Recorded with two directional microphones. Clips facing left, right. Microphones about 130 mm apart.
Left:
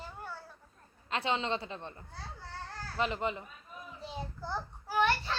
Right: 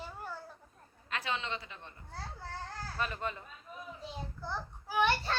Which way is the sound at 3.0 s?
20° left (ahead or behind).